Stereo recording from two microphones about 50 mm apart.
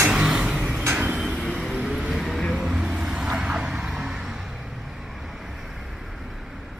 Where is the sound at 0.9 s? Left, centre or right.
Right.